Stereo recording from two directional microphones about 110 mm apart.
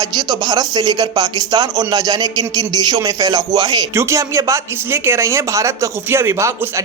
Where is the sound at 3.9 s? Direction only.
25° right (ahead or behind).